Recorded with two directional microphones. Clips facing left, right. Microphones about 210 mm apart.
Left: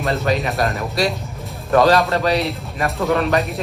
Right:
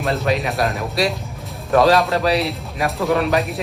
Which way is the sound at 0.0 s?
Centre (ahead or behind).